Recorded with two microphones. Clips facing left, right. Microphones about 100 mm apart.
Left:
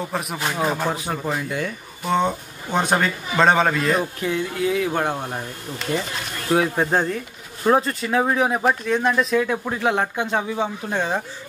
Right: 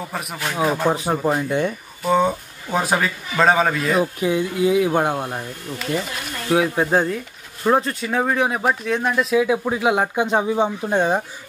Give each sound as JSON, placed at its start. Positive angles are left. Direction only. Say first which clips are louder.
{"t": 0.6, "sound": "speech", "louder": "right 4 dB", "side_deg": -10}
{"t": 0.9, "sound": "speech", "louder": "right 5 dB", "side_deg": -30}
{"t": 2.0, "sound": "a man's voice", "louder": "right 3 dB", "side_deg": -5}